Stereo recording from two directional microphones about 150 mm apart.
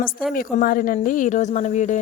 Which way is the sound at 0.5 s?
65° left (ahead or behind).